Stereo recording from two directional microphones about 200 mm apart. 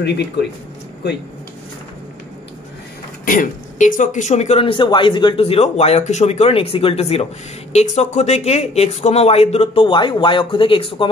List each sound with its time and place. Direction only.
3.3 s speech: 40° left (ahead or behind)